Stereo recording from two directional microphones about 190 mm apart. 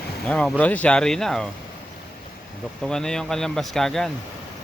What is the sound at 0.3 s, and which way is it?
A man's voice, 5° left (ahead or behind).